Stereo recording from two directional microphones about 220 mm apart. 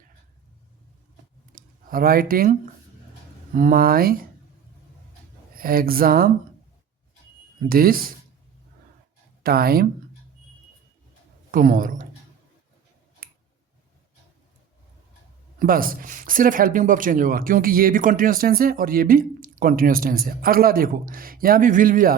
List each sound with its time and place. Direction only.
1.5 s speech: 40° right (ahead or behind)
5.5 s speech: 40° right (ahead or behind)
7.7 s speech: 40° right (ahead or behind)
9.4 s speech: 45° right (ahead or behind)
11.5 s speech: 40° right (ahead or behind)
13.2 s a sound: 40° right (ahead or behind)
15.5 s speech: 40° right (ahead or behind)